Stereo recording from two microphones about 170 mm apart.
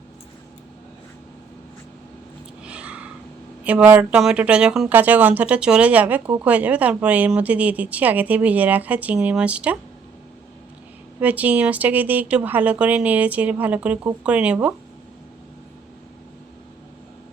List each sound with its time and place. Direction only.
2.6 s a sound: 5° right (ahead or behind)
3.6 s speech: 10° right (ahead or behind)
11.2 s speech: 10° right (ahead or behind)